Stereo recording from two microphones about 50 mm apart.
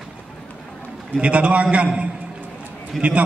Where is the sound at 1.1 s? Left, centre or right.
Right.